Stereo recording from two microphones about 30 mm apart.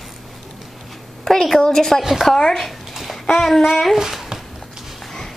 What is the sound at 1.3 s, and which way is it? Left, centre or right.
Speech, centre.